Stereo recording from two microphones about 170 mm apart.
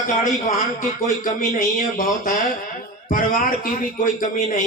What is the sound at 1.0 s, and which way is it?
A man's voice, 50° left (ahead or behind).